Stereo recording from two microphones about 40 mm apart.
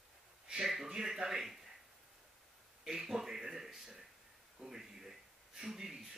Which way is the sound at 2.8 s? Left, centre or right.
Centre.